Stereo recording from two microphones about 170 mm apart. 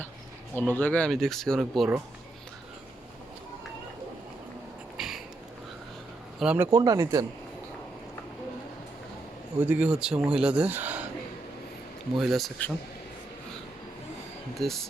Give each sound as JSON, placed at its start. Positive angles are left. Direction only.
{"t": 0.7, "sound": "speech", "side_deg": 10}
{"t": 4.9, "sound": "a sound", "side_deg": 0}
{"t": 6.4, "sound": "speech", "side_deg": -5}
{"t": 6.7, "sound": "speech", "side_deg": -20}
{"t": 9.6, "sound": "speech", "side_deg": -10}
{"t": 12.1, "sound": "speech", "side_deg": 0}
{"t": 14.5, "sound": "speech", "side_deg": 0}